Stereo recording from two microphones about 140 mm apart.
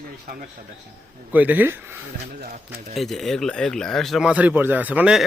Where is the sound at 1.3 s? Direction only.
10° right (ahead or behind).